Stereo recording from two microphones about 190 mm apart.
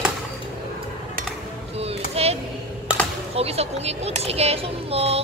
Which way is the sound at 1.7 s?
30° right (ahead or behind).